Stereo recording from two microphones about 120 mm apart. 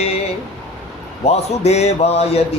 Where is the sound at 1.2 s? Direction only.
65° left (ahead or behind).